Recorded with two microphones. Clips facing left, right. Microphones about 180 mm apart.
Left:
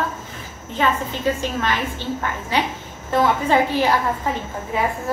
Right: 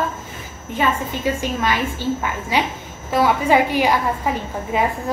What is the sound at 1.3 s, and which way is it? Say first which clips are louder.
A woman's voice: right 1 dB; 10° right (ahead or behind).